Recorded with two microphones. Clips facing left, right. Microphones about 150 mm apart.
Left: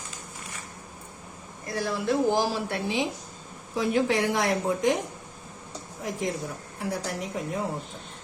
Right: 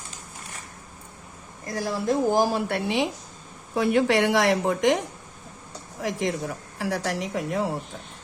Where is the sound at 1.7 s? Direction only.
40° right (ahead or behind); by 5.0 s 85° right.